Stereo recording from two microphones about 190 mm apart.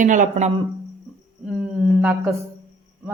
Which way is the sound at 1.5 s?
5° right (ahead or behind).